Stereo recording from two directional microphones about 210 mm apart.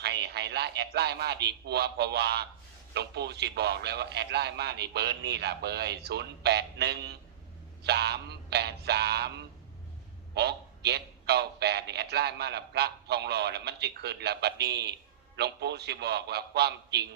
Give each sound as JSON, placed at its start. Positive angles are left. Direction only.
{"t": 0.0, "sound": "a man's voice", "side_deg": -50}
{"t": 10.3, "sound": "a man's voice", "side_deg": -50}